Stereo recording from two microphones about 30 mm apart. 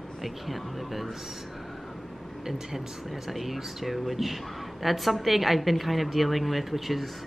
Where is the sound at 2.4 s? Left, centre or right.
Centre.